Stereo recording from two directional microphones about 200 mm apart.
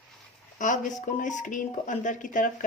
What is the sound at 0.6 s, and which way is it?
A woman's voice, 40° left (ahead or behind).